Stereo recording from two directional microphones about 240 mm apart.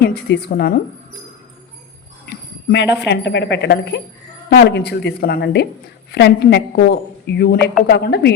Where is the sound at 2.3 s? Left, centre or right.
Left.